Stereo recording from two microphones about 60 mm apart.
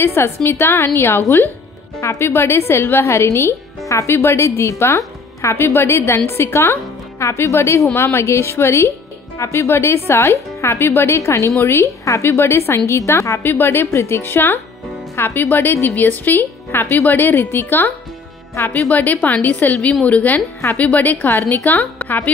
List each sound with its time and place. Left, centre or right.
0.0 s a woman's voice: left
13.4 s a woman's voice: left